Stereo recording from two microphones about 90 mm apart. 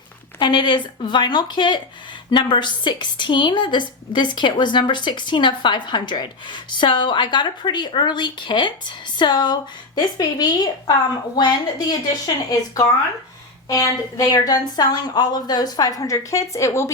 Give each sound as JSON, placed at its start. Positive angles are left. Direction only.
{"t": 0.3, "sound": "a woman's voice", "side_deg": 60}